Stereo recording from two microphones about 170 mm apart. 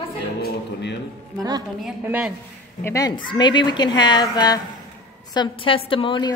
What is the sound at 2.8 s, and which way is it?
A woman's voice, 20° left (ahead or behind).